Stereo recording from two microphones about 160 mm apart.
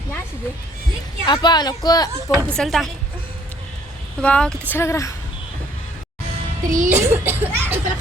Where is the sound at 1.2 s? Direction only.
30° left (ahead or behind).